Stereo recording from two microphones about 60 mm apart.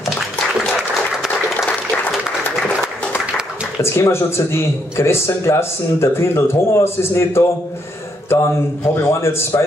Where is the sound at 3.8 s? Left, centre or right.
Left.